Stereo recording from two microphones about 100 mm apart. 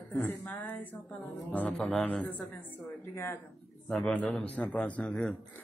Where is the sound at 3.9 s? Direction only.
10° left (ahead or behind).